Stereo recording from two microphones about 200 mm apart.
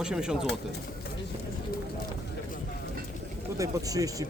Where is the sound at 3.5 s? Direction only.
15° right (ahead or behind).